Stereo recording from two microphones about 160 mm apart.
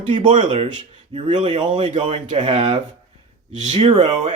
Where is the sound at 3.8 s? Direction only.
45° right (ahead or behind).